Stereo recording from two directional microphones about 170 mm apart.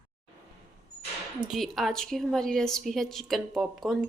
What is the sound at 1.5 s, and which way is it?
A woman's voice, centre (ahead or behind).